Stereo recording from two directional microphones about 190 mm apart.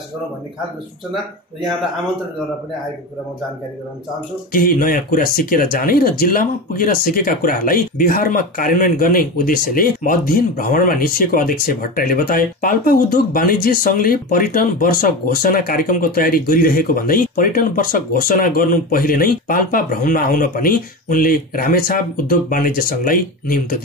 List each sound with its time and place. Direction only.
4.5 s speech: 45° left (ahead or behind)